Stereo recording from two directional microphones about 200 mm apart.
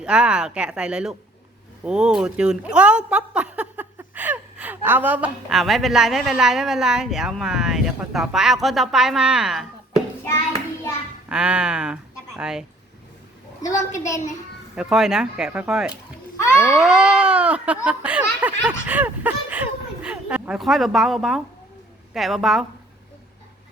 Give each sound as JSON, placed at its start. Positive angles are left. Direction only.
{"t": 0.0, "sound": "speech", "side_deg": -5}
{"t": 11.3, "sound": "speech", "side_deg": -5}
{"t": 14.8, "sound": "speech", "side_deg": 0}
{"t": 16.4, "sound": "a sound", "side_deg": 15}
{"t": 16.7, "sound": "speech", "side_deg": 0}